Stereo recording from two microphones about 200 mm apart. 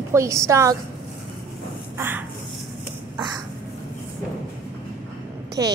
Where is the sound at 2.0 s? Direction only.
10° right (ahead or behind).